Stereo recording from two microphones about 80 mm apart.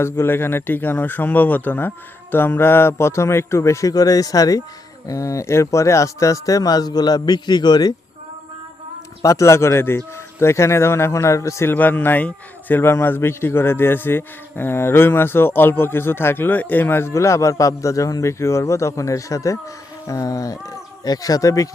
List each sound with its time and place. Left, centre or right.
0.0 s a man's voice: left
9.2 s a man's voice: left
11.7 s speech: left